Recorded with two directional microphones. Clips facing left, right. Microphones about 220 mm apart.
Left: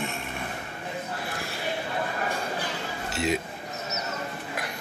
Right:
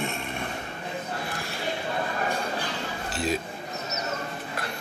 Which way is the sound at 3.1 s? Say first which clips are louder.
Left 1 dB; 25° left (ahead or behind).